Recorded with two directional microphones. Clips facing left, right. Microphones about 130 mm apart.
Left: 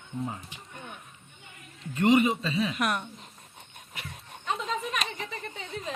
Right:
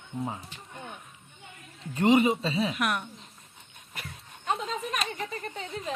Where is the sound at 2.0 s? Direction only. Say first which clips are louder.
Even; 30° right (ahead or behind).